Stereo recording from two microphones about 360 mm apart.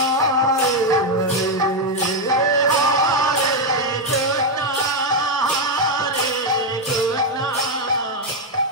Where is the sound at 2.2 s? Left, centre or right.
Centre.